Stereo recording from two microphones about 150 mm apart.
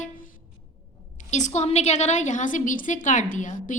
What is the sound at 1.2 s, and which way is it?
A woman's voice, 50° left (ahead or behind).